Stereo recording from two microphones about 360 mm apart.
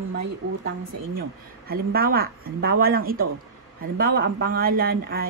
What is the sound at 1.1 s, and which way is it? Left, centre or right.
Speech, right.